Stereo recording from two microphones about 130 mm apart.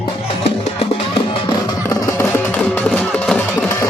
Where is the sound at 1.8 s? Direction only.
20° left (ahead or behind).